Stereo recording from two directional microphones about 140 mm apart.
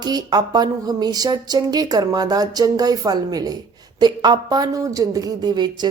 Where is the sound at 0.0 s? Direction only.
30° right (ahead or behind).